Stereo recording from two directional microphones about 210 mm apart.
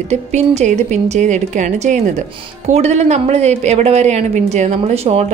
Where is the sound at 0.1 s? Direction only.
30° right (ahead or behind).